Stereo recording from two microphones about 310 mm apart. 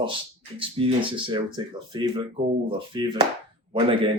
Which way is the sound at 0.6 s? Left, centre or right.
Centre.